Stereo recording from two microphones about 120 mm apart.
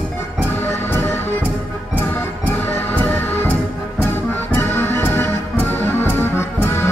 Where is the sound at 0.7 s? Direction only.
20° left (ahead or behind).